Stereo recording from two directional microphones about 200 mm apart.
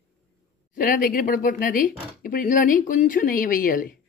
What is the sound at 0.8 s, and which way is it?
Speech, 45° left (ahead or behind).